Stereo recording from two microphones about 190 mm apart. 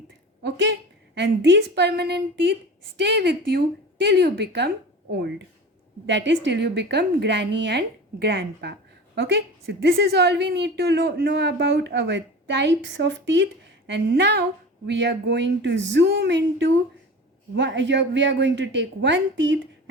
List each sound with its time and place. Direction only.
0.4 s a woman's voice: 65° right (ahead or behind)
6.1 s a woman's voice: 70° right (ahead or behind)